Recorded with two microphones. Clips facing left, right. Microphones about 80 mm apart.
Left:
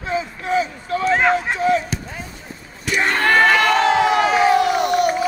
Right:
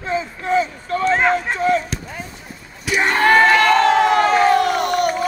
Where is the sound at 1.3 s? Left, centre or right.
Right.